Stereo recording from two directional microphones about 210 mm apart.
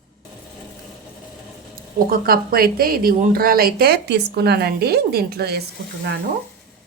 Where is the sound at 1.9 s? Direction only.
45° right (ahead or behind).